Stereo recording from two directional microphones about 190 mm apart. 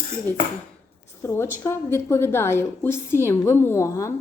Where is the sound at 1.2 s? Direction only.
15° left (ahead or behind).